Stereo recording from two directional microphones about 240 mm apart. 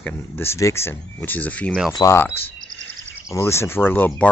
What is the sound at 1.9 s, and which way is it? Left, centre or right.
Speech, centre.